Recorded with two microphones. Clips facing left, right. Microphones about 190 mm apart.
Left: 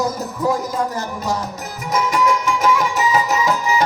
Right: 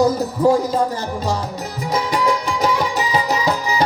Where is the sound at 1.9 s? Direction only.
35° right (ahead or behind).